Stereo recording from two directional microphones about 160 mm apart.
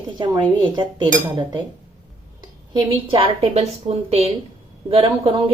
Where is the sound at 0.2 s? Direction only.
30° right (ahead or behind).